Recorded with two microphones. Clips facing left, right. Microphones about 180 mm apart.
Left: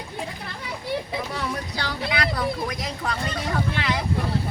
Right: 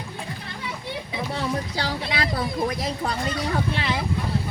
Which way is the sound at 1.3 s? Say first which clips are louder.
Right 3 dB; 25° right (ahead or behind).